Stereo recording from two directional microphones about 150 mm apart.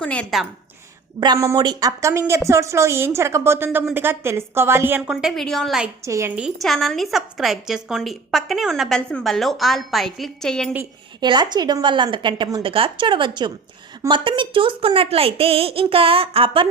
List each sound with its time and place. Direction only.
0.0 s a woman's voice: 5° left (ahead or behind)
1.2 s a woman's voice: 25° right (ahead or behind); by 5.9 s centre (ahead or behind)
6.1 s a woman's voice: 20° right (ahead or behind)
6.3 s a woman's voice: centre (ahead or behind)
11.2 s a woman's voice: 30° right (ahead or behind)